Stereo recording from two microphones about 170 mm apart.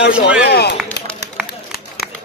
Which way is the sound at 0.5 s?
70° left (ahead or behind).